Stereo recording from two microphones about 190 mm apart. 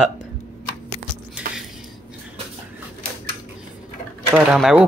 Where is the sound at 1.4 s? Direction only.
5° right (ahead or behind).